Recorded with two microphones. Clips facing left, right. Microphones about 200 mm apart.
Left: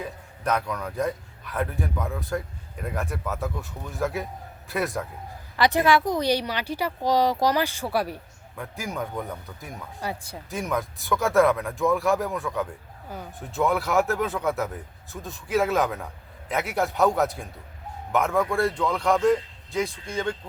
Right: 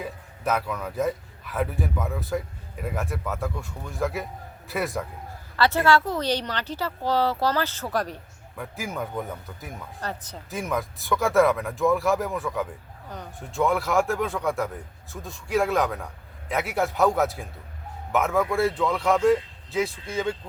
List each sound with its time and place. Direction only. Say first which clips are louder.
0.0 s a man's voice: right 1 dB; 5° right (ahead or behind)
5.5 s speech: even; 15° left (ahead or behind)
8.5 s a man's voice: even; centre (ahead or behind)
10.0 s speech: left 2 dB; 10° left (ahead or behind)
10.5 s a man's voice: even; centre (ahead or behind)